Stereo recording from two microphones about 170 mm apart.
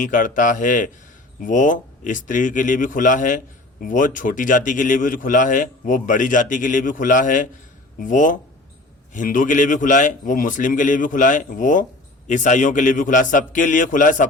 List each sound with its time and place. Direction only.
0.0 s a man's voice: 50° left (ahead or behind)